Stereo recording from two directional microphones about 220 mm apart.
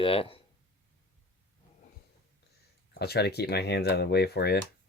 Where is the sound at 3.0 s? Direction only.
45° left (ahead or behind).